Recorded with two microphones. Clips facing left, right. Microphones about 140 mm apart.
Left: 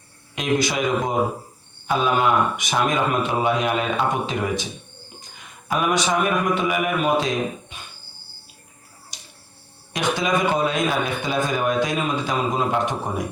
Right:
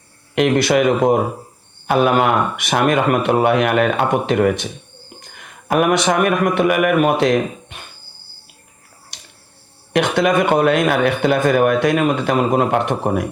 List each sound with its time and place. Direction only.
0.3 s speech: 65° right (ahead or behind)
9.9 s speech: 60° right (ahead or behind)